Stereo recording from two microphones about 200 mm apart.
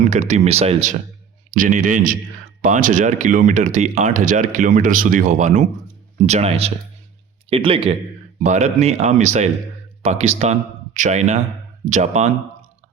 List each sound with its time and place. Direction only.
0.1 s a man's voice: 35° right (ahead or behind)